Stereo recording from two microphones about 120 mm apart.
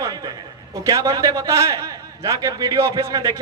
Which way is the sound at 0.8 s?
30° right (ahead or behind).